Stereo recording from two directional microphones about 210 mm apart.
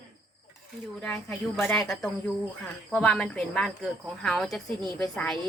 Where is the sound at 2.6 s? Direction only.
5° left (ahead or behind).